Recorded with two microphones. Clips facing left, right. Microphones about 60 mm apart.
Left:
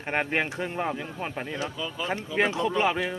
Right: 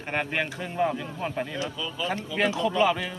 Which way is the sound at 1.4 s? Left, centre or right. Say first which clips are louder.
Even; left.